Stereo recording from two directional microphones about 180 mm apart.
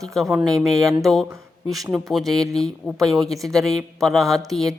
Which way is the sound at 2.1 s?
Centre (ahead or behind).